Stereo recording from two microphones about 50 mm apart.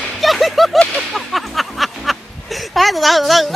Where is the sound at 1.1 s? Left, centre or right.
Centre.